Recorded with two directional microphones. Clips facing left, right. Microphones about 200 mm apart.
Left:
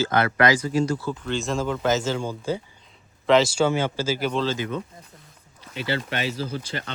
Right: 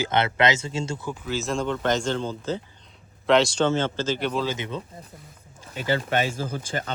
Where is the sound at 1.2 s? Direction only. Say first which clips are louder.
Left 1 dB; 5° right (ahead or behind).